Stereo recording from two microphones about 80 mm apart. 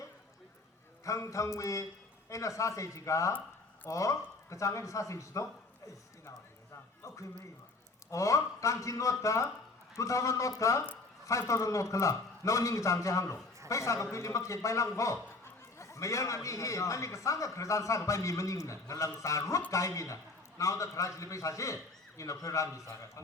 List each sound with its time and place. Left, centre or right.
1.0 s a man's voice: left
8.1 s a man's voice: left